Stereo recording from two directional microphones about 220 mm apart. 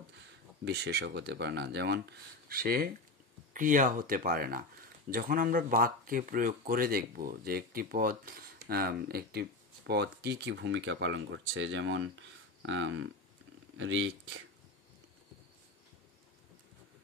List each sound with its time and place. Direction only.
0.7 s speech: 50° right (ahead or behind)